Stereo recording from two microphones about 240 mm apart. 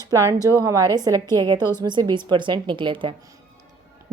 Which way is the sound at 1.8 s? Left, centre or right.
Centre.